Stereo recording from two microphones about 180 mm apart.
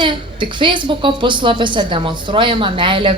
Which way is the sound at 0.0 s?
25° right (ahead or behind).